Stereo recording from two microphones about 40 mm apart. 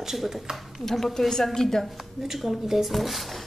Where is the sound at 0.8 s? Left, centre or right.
Centre.